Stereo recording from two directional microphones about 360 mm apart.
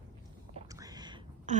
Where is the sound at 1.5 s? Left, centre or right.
Centre.